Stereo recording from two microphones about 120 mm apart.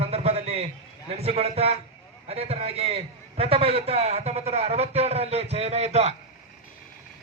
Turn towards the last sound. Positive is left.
turn(degrees=-65)  # may be behind; listen again after turning